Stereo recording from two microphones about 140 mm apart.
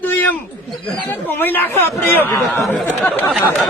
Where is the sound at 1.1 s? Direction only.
15° left (ahead or behind).